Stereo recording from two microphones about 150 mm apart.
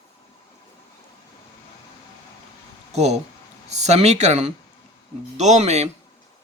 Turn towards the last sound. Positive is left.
turn(degrees=-50)  # may be behind; listen again after turning